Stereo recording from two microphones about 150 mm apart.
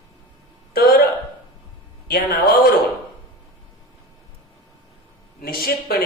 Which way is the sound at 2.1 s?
80° left.